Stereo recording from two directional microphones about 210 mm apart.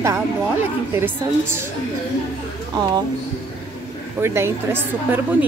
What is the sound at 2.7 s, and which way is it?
Speech, 20° right (ahead or behind).